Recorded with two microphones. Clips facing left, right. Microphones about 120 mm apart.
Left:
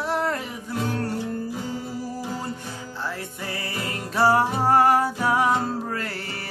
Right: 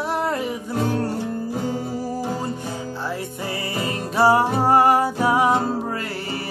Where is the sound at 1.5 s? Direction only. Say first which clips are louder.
Right 5 dB; 45° right (ahead or behind).